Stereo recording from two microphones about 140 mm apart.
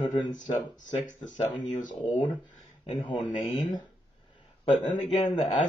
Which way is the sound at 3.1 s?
35° left (ahead or behind).